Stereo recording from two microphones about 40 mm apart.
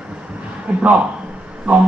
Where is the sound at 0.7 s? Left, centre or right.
Right.